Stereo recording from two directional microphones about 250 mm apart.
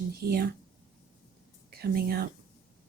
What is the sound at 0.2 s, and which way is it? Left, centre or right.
Speech, right.